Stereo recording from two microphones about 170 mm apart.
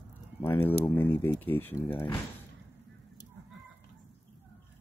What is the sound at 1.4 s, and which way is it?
Speech, 10° left (ahead or behind).